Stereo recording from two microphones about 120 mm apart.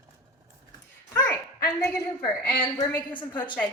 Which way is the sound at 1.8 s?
35° left (ahead or behind).